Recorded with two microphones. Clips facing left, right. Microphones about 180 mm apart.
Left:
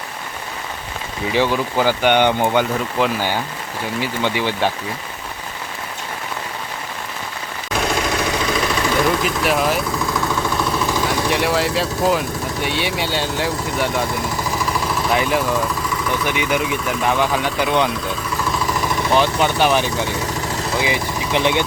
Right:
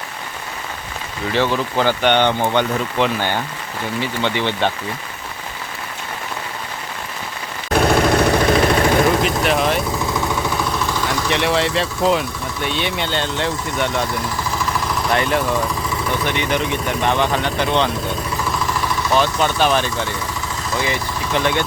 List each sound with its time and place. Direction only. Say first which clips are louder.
1.3 s speech: even; 10° left (ahead or behind)
7.7 s vehicle: right 6 dB; 60° right (ahead or behind)
9.2 s speech: right 1 dB; 5° left (ahead or behind)
11.3 s speech: right 3 dB; 5° left (ahead or behind)
14.7 s vehicle: even; 5° left (ahead or behind)
16.2 s speech: left 1 dB; 10° left (ahead or behind)
18.9 s speech: left 1 dB; 15° left (ahead or behind)